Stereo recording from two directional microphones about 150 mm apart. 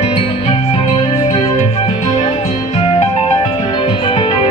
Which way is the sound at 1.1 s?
50° left (ahead or behind).